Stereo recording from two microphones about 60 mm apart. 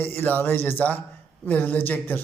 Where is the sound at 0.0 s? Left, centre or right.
Left.